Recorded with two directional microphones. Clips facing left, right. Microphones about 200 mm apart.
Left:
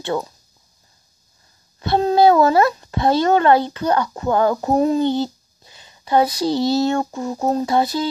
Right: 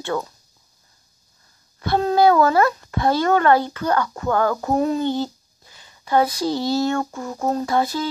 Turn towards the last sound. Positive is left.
turn(degrees=20)  # may be behind; listen again after turning